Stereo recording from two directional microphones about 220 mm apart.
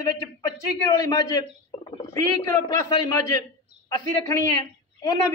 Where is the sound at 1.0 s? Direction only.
15° left (ahead or behind).